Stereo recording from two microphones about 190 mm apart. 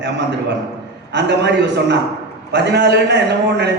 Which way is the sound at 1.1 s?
65° right (ahead or behind).